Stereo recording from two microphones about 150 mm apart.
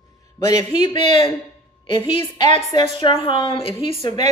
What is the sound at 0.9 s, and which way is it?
Speech, 35° left (ahead or behind).